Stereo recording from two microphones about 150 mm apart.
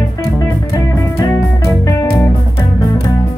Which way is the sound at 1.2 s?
20° left (ahead or behind).